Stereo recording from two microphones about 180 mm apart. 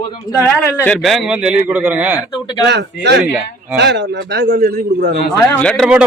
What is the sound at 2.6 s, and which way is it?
A man's voice, 70° right (ahead or behind).